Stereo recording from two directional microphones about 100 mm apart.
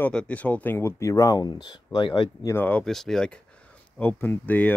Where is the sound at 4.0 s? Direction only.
20° left (ahead or behind).